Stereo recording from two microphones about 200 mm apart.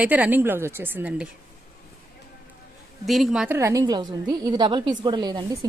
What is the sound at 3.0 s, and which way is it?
A woman's voice, centre (ahead or behind).